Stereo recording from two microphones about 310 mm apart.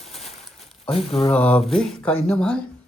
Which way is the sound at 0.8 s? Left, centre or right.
Centre.